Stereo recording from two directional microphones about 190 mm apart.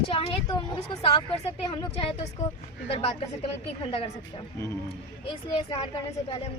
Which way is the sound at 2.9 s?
30° left (ahead or behind).